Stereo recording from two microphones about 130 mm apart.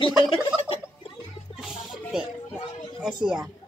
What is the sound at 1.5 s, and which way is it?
Music, 5° right (ahead or behind).